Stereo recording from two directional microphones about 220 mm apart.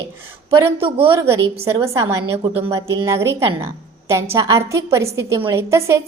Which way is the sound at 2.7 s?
10° right (ahead or behind).